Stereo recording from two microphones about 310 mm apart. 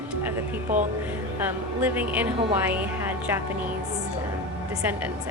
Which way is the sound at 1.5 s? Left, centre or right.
Centre.